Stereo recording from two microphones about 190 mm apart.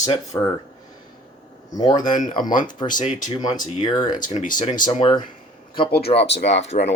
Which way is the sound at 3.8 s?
20° left (ahead or behind).